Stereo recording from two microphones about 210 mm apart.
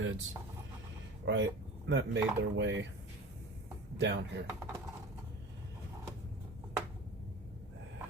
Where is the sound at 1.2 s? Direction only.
60° right (ahead or behind).